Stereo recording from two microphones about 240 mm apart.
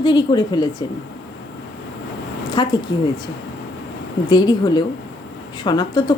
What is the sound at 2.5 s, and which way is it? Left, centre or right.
Speech, centre.